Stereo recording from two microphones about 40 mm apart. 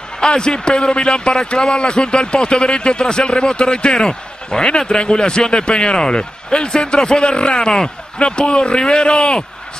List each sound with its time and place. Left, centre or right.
0.2 s a man's voice: centre